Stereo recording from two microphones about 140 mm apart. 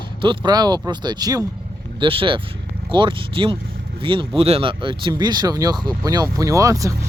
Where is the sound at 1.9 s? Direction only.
40° right (ahead or behind).